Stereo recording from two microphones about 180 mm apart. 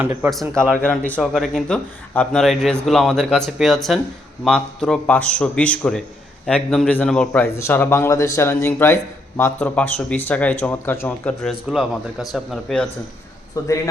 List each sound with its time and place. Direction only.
0.0 s a man's voice: 10° right (ahead or behind)
0.3 s a man's voice: centre (ahead or behind)
11.4 s speech: centre (ahead or behind)
13.6 s a man's voice: 20° left (ahead or behind)